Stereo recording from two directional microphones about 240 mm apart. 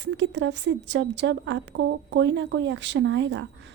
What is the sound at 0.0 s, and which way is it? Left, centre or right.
A woman's voice, right.